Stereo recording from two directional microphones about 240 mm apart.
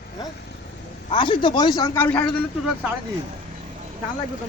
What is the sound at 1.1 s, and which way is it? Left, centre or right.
Speech, left.